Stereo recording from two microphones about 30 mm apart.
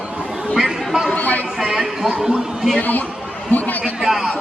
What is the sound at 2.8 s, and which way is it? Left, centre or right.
A man's voice, left.